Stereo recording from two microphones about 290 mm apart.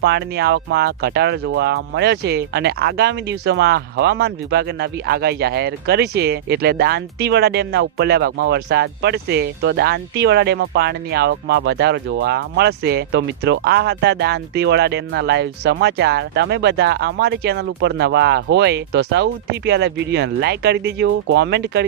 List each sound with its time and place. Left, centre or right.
0.0 s speech: right